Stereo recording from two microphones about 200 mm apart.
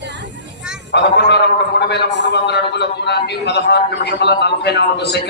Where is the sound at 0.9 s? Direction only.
60° left (ahead or behind).